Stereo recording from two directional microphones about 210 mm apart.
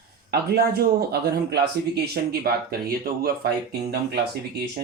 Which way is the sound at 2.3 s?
45° right (ahead or behind).